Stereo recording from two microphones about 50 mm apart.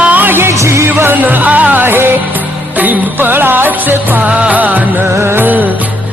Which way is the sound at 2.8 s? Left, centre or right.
Right.